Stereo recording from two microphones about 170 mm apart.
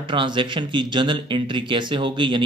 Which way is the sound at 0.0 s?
30° right (ahead or behind).